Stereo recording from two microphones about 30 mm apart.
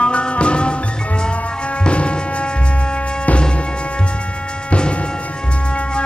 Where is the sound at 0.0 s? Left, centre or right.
Left.